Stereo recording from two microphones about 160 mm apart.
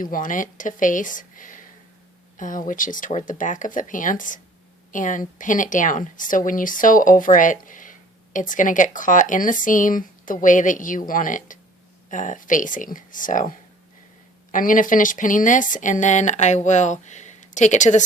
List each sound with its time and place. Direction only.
0.0 s speech: 55° left (ahead or behind)